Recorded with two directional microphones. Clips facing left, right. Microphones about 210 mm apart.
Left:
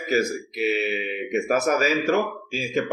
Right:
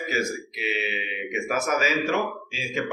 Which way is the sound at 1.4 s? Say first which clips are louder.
Left 3 dB; 40° left (ahead or behind).